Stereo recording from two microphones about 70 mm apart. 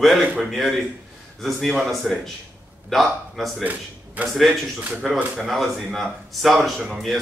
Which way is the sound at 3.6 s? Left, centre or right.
Right.